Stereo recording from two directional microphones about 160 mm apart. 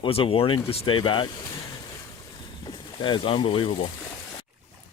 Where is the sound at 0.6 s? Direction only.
30° left (ahead or behind).